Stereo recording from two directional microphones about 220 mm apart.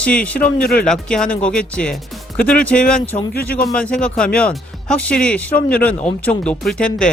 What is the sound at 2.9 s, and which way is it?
Speech, 30° left (ahead or behind).